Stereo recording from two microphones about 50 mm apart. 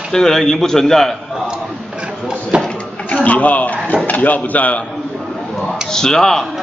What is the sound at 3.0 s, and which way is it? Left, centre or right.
Speech, left.